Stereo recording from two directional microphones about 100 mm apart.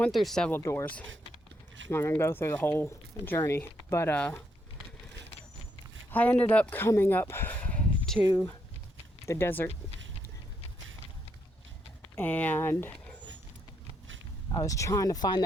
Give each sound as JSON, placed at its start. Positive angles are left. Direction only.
{"t": 0.1, "sound": "speech", "side_deg": 0}
{"t": 0.5, "sound": "speech", "side_deg": 30}
{"t": 1.9, "sound": "speech", "side_deg": 25}
{"t": 6.1, "sound": "speech", "side_deg": 15}
{"t": 9.2, "sound": "speech", "side_deg": 25}
{"t": 12.1, "sound": "speech", "side_deg": 20}
{"t": 14.6, "sound": "speech", "side_deg": 35}